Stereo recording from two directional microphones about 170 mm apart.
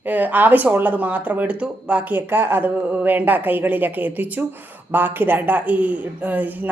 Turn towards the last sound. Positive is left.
turn(degrees=-10)  # may be behind; listen again after turning